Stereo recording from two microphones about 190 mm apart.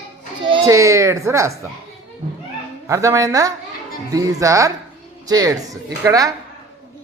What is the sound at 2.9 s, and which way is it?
A woman's voice, 15° right (ahead or behind).